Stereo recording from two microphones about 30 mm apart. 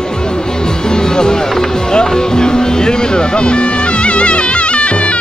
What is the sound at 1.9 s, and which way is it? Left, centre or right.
Music, left.